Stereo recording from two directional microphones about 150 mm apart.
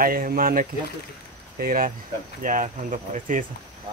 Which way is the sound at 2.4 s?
60° right (ahead or behind).